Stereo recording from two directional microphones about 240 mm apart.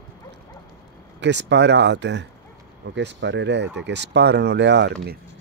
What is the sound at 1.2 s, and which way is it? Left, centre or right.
Speech, right.